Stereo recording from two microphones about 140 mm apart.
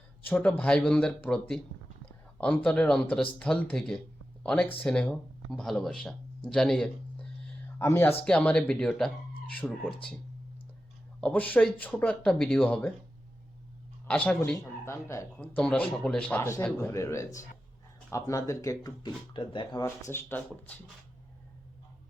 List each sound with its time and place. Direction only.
0.3 s speech: 10° left (ahead or behind)
7.8 s speech: 20° left (ahead or behind)
8.2 s speech: 5° left (ahead or behind)
11.2 s speech: 10° left (ahead or behind)
14.1 s speech: 10° left (ahead or behind)
14.8 s speech: 20° left (ahead or behind)
15.5 s speech: 10° left (ahead or behind)
16.4 s speech: 20° left (ahead or behind); by 19.8 s 35° left (ahead or behind)
20.1 s speech: 15° left (ahead or behind)